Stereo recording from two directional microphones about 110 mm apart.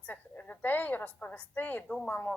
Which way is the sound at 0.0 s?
15° left (ahead or behind).